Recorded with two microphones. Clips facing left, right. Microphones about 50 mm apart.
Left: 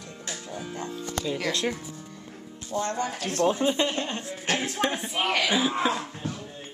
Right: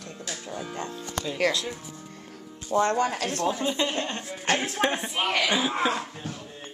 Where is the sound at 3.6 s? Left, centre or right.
Left.